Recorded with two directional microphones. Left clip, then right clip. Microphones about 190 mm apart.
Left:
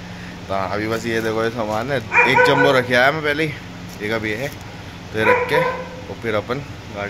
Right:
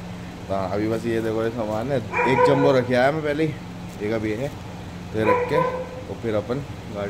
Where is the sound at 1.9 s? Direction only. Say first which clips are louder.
Left 7 dB; 10° right (ahead or behind).